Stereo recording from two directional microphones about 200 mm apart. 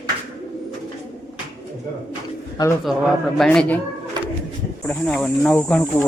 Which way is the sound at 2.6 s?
20° left (ahead or behind).